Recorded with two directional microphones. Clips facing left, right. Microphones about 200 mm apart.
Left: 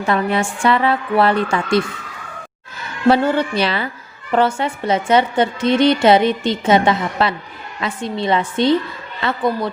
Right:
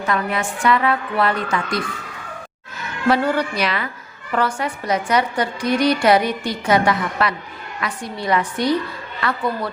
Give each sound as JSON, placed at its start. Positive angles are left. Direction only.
{"t": 0.0, "sound": "a woman's voice", "side_deg": 30}
{"t": 3.1, "sound": "a woman's voice", "side_deg": 25}